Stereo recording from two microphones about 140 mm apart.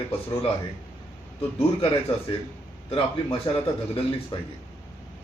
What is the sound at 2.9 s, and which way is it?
Speech, 40° left (ahead or behind).